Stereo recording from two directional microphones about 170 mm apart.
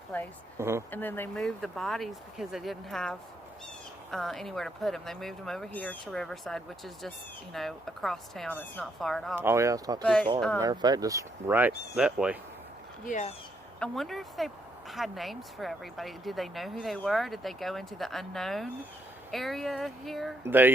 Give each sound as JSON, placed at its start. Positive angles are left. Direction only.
{"t": 0.6, "sound": "speech", "side_deg": -15}
{"t": 0.9, "sound": "speech", "side_deg": 10}
{"t": 9.3, "sound": "speech", "side_deg": -15}
{"t": 10.0, "sound": "speech", "side_deg": 5}
{"t": 10.6, "sound": "speech", "side_deg": -25}
{"t": 13.1, "sound": "speech", "side_deg": 45}
{"t": 13.7, "sound": "speech", "side_deg": 5}
{"t": 20.5, "sound": "speech", "side_deg": -10}